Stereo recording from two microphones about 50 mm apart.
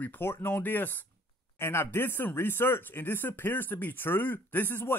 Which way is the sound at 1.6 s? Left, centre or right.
Left.